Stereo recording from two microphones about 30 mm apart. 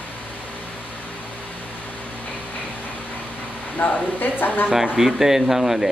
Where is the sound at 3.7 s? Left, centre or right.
Left.